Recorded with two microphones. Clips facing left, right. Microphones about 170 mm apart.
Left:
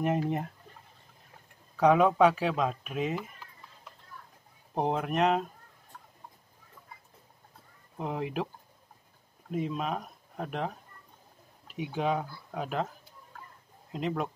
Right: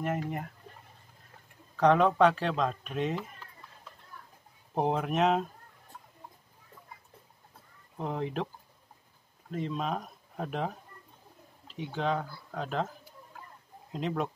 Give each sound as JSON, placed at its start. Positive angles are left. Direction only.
{"t": 0.0, "sound": "speech", "side_deg": 20}
{"t": 1.8, "sound": "speech", "side_deg": 5}
{"t": 4.7, "sound": "speech", "side_deg": 0}
{"t": 8.0, "sound": "speech", "side_deg": 5}
{"t": 9.5, "sound": "speech", "side_deg": 5}
{"t": 11.6, "sound": "speech", "side_deg": 10}
{"t": 13.9, "sound": "speech", "side_deg": 0}